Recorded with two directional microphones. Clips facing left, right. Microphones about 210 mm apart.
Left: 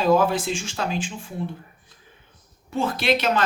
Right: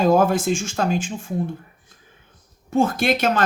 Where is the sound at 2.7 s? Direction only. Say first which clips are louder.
Right 3 dB; 45° right (ahead or behind).